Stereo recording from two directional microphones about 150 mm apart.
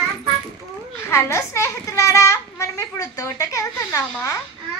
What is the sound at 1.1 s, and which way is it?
A child's voice, 20° left (ahead or behind).